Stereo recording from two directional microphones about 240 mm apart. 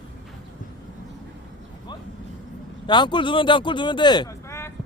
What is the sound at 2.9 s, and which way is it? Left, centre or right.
Speech, centre.